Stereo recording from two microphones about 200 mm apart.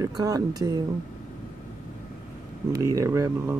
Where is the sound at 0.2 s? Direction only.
20° right (ahead or behind).